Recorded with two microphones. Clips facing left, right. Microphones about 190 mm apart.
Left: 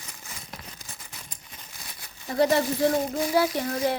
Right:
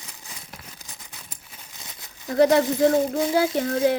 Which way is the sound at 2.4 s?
55° right (ahead or behind).